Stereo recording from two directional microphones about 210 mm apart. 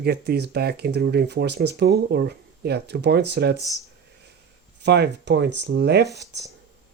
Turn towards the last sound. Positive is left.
turn(degrees=-55)  # may be behind; listen again after turning